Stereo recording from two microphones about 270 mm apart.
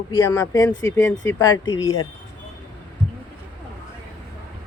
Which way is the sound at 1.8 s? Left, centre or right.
Left.